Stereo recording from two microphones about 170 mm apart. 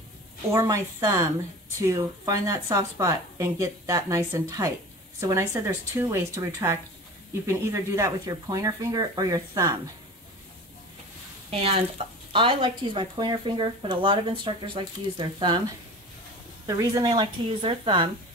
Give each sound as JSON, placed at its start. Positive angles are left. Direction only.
{"t": 0.5, "sound": "speech", "side_deg": -20}
{"t": 11.5, "sound": "speech", "side_deg": -35}
{"t": 16.6, "sound": "speech", "side_deg": -20}